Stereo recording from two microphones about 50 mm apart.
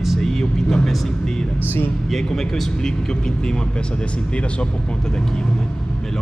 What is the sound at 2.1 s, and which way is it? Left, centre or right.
Speech, centre.